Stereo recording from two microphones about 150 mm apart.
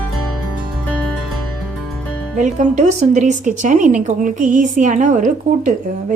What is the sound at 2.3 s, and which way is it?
Speech, 55° right (ahead or behind).